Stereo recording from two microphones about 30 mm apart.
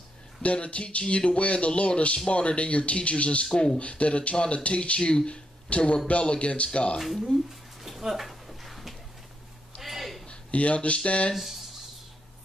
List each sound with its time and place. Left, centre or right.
0.4 s speech: left
7.0 s speech: centre
7.8 s a sound: centre
10.2 s a sound: left
11.1 s speech: left
11.3 s speech: centre